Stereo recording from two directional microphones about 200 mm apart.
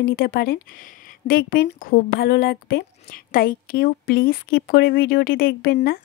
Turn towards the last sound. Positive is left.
turn(degrees=50)  # may be behind; listen again after turning